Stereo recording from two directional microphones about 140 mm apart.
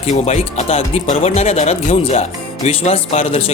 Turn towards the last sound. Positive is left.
turn(degrees=55)  # may be behind; listen again after turning